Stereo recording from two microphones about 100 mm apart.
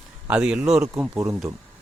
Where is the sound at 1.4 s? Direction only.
35° right (ahead or behind).